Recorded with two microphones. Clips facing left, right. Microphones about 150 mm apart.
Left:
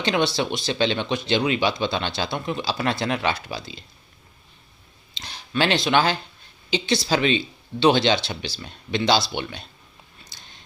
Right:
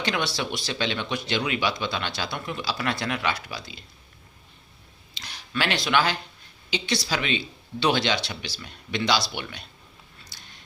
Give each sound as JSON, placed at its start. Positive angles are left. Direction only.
{"t": 0.0, "sound": "speech", "side_deg": 25}
{"t": 5.1, "sound": "speech", "side_deg": 25}
{"t": 10.2, "sound": "a sound", "side_deg": 20}